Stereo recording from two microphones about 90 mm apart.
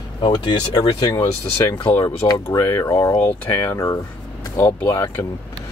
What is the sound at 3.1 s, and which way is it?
Speech, 30° left (ahead or behind).